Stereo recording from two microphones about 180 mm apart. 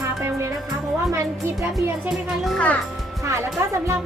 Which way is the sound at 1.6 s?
15° right (ahead or behind).